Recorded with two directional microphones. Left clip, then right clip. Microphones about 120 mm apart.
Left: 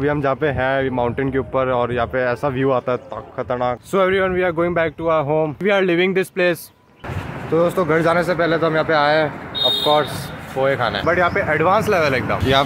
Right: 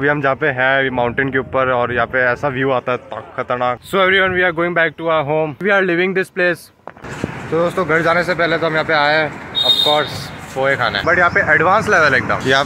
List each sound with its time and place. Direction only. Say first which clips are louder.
0.0 s speech: right 4 dB; 15° left (ahead or behind)
0.4 s speech: right 4 dB; 25° left (ahead or behind)
5.6 s speech: right 3 dB; 25° left (ahead or behind)
7.5 s speech: right 1 dB; 25° left (ahead or behind)
10.6 s speech: right 2 dB; 25° left (ahead or behind)